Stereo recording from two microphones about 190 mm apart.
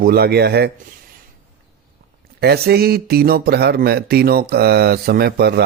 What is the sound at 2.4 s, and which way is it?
Speech, 55° right (ahead or behind).